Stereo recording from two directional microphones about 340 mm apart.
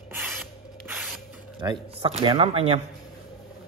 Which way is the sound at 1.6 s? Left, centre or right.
Centre.